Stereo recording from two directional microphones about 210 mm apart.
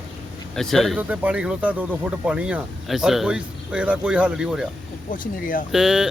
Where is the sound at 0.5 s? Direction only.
Centre (ahead or behind).